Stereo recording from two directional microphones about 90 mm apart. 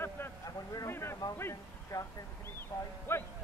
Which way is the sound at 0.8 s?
30° left (ahead or behind).